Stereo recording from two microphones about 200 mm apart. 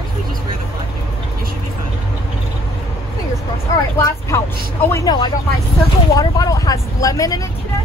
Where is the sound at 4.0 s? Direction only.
15° left (ahead or behind).